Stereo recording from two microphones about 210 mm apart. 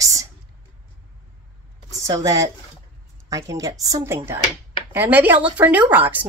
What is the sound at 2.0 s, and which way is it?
A woman's voice, 15° right (ahead or behind).